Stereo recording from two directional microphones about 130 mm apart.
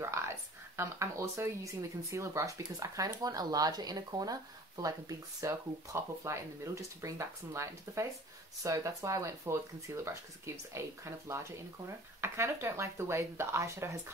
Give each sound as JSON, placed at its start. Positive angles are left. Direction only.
{"t": 0.7, "sound": "speech", "side_deg": -20}